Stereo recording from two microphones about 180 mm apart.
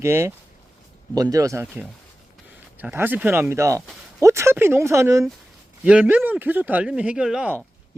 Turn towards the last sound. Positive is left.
turn(degrees=-5)  # may be behind; listen again after turning